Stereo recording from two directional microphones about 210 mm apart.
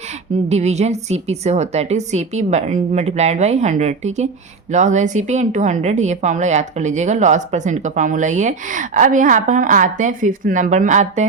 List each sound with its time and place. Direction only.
0.4 s a woman's voice: 30° right (ahead or behind)